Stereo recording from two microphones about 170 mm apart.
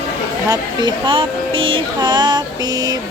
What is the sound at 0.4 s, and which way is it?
Speech, 25° right (ahead or behind).